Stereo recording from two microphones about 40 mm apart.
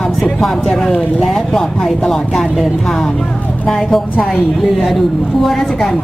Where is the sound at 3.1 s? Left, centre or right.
Centre.